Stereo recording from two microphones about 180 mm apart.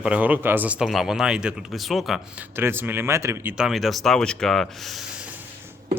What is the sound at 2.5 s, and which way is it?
Speech, 10° right (ahead or behind).